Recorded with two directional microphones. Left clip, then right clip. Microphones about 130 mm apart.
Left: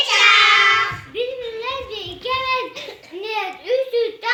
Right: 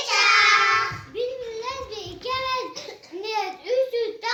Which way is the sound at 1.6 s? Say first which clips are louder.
Left 5 dB; 20° right (ahead or behind).